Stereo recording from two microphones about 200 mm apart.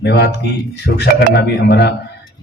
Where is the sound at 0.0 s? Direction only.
55° left (ahead or behind).